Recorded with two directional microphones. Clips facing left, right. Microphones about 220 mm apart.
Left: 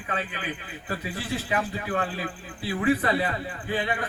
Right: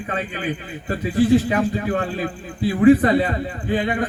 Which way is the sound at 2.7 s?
45° right (ahead or behind).